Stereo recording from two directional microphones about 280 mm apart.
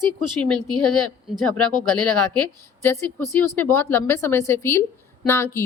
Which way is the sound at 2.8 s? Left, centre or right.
Centre.